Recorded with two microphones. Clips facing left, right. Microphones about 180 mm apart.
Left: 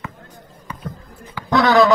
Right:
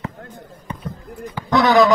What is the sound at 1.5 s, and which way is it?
Speech, 20° right (ahead or behind).